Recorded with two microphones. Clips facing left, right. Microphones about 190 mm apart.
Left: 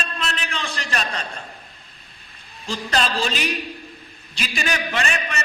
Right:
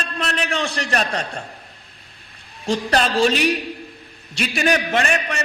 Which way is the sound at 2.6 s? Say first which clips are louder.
Right 4 dB; 60° right (ahead or behind).